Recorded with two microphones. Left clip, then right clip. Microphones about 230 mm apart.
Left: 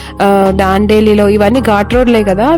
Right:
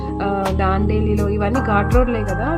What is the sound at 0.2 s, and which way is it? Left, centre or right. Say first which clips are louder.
Speech: left 12 dB; left.